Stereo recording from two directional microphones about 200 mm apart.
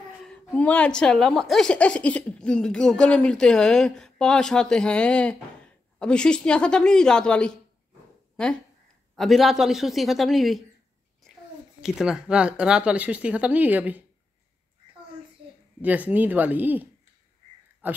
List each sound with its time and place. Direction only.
0.2 s speech: 5° left (ahead or behind)
11.8 s speech: 5° right (ahead or behind)
15.8 s speech: 10° right (ahead or behind)
17.8 s speech: 10° right (ahead or behind)